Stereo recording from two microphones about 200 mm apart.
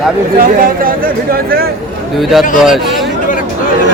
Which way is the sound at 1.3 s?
45° right (ahead or behind).